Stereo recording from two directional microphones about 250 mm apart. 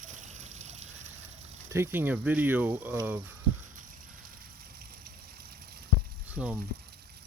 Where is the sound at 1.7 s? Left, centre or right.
Centre.